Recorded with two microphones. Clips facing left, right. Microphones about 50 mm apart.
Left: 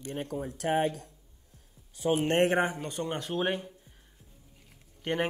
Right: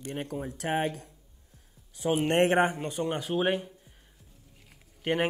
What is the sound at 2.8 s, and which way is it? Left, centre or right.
Speech, centre.